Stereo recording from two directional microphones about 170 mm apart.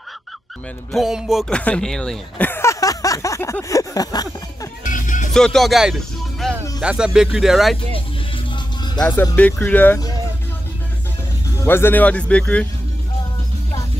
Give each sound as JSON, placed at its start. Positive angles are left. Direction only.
{"t": 0.9, "sound": "speech", "side_deg": -5}
{"t": 4.8, "sound": "music", "side_deg": 50}
{"t": 5.3, "sound": "speech", "side_deg": 5}
{"t": 6.4, "sound": "music", "side_deg": 0}
{"t": 6.8, "sound": "speech", "side_deg": -5}
{"t": 9.0, "sound": "speech", "side_deg": 15}
{"t": 11.6, "sound": "speech", "side_deg": 15}